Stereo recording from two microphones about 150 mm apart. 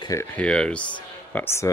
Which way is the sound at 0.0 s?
20° left (ahead or behind).